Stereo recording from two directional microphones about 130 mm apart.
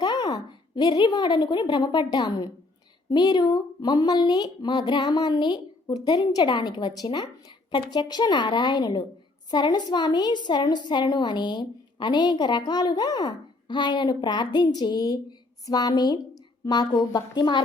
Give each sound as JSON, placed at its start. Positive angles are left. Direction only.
{"t": 0.0, "sound": "a woman's voice", "side_deg": 35}